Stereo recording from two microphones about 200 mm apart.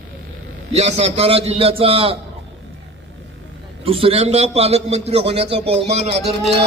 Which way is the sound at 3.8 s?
30° right (ahead or behind).